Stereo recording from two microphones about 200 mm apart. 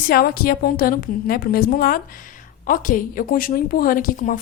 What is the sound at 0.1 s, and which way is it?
A woman's voice, 50° left (ahead or behind).